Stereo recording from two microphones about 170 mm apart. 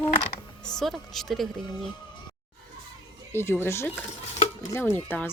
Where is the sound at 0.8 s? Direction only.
Centre (ahead or behind).